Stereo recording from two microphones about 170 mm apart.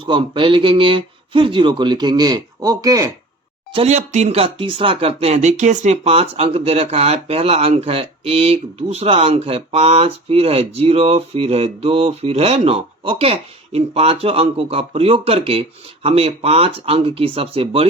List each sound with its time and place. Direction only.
0.0 s a man's voice: 30° right (ahead or behind)
3.7 s speech: 35° right (ahead or behind)